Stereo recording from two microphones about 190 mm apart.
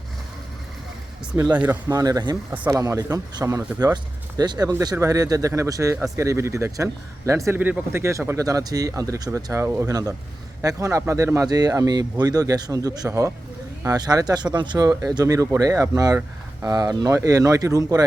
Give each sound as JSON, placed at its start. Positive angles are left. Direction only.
{"t": 1.3, "sound": "speech", "side_deg": -5}
{"t": 1.9, "sound": "speech", "side_deg": -20}